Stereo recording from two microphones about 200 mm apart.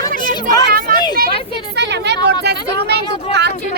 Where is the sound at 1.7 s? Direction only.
60° right (ahead or behind).